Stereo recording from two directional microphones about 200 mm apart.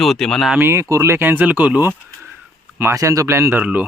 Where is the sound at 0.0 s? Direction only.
Centre (ahead or behind).